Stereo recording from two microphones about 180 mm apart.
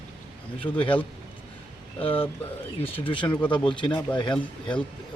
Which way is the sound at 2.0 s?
30° left (ahead or behind).